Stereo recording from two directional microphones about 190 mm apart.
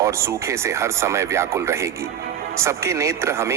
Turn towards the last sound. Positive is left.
turn(degrees=-15)  # may be behind; listen again after turning